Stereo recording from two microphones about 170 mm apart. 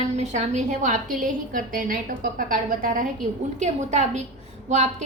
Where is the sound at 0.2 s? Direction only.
45° right (ahead or behind).